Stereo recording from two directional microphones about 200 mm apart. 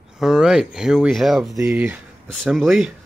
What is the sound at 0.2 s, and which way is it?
Speech, 5° right (ahead or behind).